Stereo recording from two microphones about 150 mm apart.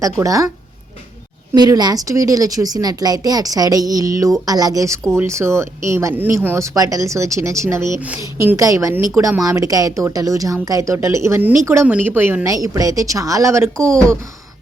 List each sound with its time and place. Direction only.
0.0 s a woman's voice: 20° right (ahead or behind)
1.5 s a woman's voice: 25° right (ahead or behind)